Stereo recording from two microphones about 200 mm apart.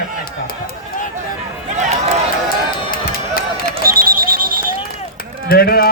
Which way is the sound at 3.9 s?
45° right (ahead or behind).